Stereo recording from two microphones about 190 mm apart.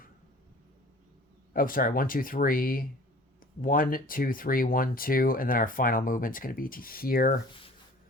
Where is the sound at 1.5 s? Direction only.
50° left (ahead or behind).